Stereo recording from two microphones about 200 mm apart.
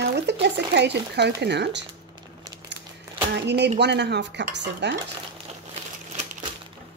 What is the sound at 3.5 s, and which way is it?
Speech, 60° right (ahead or behind).